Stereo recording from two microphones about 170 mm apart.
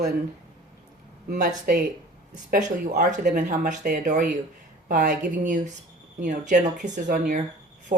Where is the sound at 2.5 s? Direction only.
55° right (ahead or behind).